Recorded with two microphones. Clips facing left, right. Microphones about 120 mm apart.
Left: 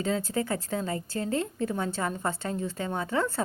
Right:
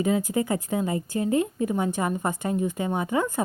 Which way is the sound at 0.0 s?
15° right (ahead or behind).